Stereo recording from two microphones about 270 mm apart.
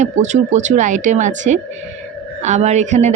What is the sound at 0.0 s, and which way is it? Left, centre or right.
A woman's voice, right.